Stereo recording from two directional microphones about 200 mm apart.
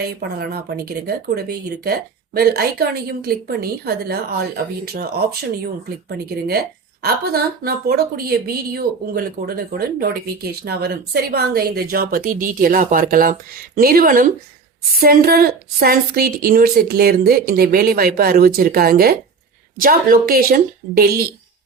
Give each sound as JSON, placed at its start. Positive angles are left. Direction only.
{"t": 0.2, "sound": "speech", "side_deg": -55}